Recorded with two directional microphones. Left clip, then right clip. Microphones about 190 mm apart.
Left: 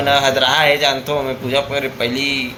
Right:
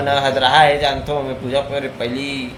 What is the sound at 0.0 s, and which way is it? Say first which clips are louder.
A man's voice: left 2 dB; 15° right (ahead or behind).